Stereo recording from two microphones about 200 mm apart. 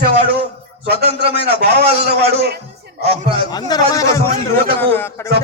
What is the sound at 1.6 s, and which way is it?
Speech, 55° right (ahead or behind).